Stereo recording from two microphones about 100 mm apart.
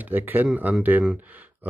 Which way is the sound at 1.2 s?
15° right (ahead or behind).